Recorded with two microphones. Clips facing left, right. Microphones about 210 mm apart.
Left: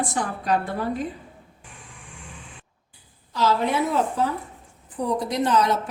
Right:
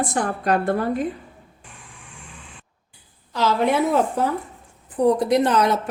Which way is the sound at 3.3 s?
65° right (ahead or behind).